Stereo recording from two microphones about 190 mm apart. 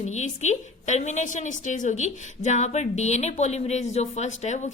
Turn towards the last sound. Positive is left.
turn(degrees=40)  # may be behind; listen again after turning